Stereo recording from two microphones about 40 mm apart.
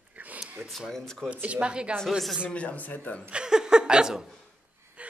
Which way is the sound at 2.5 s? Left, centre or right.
Left.